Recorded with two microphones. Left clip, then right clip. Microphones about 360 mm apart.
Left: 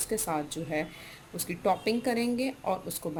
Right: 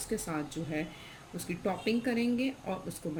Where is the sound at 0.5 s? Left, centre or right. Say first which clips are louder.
Left 4 dB; centre.